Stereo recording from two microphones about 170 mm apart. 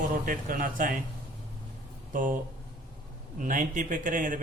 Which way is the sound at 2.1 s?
50° right (ahead or behind).